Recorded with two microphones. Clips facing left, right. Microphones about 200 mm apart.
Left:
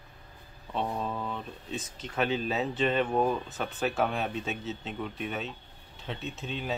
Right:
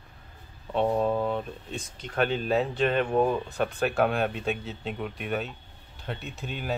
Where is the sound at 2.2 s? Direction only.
55° right (ahead or behind).